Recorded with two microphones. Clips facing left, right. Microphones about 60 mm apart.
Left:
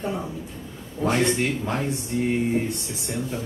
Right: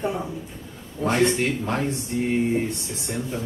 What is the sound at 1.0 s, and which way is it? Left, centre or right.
Speech, centre.